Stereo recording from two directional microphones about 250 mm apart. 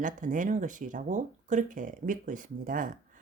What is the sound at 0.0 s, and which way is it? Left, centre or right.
Speech, right.